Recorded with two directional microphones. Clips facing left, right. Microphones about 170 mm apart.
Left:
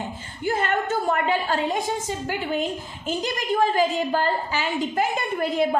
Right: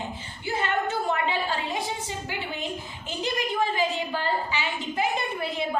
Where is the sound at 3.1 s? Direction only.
45° left (ahead or behind).